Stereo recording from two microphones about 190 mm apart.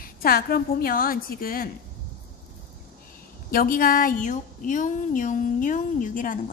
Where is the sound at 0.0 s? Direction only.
50° left (ahead or behind).